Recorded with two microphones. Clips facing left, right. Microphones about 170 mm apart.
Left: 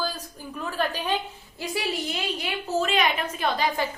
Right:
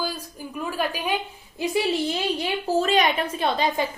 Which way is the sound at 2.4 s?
30° right (ahead or behind).